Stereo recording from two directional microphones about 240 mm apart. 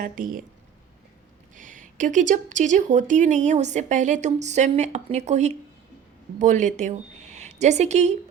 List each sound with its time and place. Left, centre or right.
0.0 s speech: right
1.5 s speech: right